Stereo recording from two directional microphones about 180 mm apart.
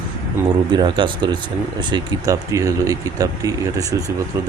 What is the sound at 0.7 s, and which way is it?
Speech, 25° right (ahead or behind).